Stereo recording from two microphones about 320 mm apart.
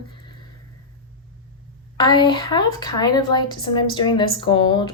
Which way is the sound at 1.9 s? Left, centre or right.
Centre.